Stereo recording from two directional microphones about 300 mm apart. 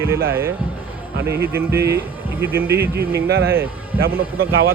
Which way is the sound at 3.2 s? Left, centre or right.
Right.